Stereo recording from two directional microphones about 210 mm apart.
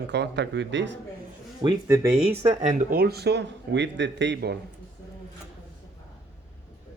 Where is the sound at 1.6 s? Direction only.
15° right (ahead or behind).